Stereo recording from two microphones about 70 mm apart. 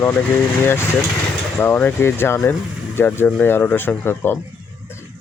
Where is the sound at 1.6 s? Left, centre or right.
Left.